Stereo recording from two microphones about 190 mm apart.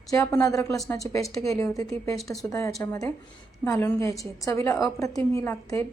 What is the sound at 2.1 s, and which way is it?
Speech, centre (ahead or behind).